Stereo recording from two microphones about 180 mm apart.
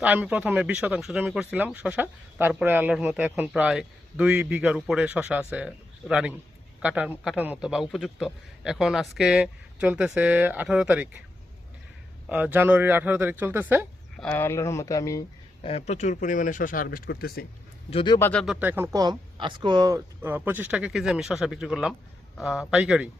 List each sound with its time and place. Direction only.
0.0 s a man's voice: 10° right (ahead or behind)
12.3 s speech: 10° right (ahead or behind)
14.2 s speech: 10° left (ahead or behind)
15.6 s speech: 35° left (ahead or behind); by 17.4 s 60° left (ahead or behind)
17.9 s a man's voice: 25° left (ahead or behind)
18.2 s a man's voice: 5° left (ahead or behind)
18.6 s a man's voice: 10° right (ahead or behind)